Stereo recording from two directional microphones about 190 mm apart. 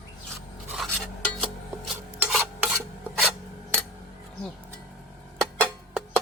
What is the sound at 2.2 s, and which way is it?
Filing, 5° right (ahead or behind).